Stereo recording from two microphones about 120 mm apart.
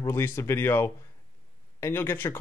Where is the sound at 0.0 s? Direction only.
25° left (ahead or behind).